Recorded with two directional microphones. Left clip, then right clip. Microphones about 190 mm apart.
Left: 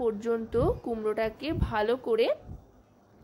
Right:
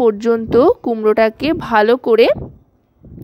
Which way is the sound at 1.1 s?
50° right (ahead or behind).